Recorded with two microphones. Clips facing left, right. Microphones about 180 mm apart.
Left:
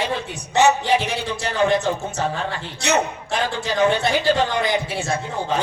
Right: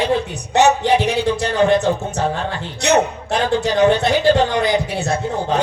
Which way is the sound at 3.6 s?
40° right (ahead or behind).